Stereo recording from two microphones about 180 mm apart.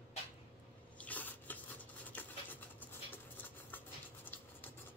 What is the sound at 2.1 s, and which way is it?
Dog, 10° left (ahead or behind).